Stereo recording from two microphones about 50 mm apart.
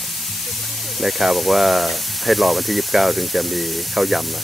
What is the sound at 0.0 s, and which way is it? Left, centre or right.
Speech, centre.